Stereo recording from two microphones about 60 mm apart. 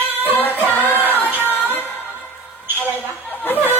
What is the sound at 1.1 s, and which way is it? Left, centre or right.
Music, left.